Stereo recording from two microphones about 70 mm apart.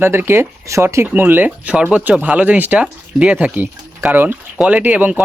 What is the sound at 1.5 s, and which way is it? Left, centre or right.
Speech, centre.